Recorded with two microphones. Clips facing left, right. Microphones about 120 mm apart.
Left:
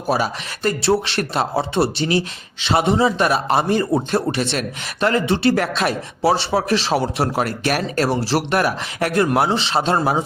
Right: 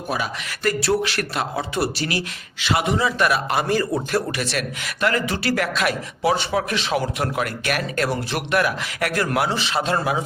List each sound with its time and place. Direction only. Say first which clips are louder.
0.1 s speech: left 6 dB; 35° left (ahead or behind)